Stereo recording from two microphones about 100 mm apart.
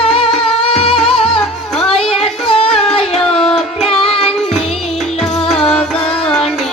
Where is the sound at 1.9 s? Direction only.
80° left.